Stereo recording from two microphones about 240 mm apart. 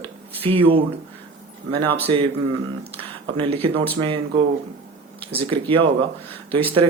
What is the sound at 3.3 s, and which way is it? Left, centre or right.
Speech, right.